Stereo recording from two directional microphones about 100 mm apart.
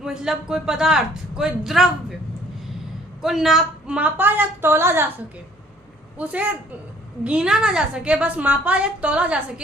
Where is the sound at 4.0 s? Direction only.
15° right (ahead or behind).